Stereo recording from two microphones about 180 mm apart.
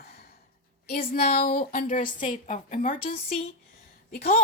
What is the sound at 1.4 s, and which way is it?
A woman's voice, 55° left (ahead or behind).